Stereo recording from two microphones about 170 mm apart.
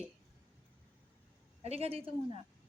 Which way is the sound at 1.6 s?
35° right (ahead or behind).